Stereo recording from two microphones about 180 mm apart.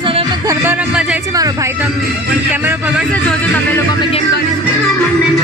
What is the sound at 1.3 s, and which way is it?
Speech, 20° right (ahead or behind).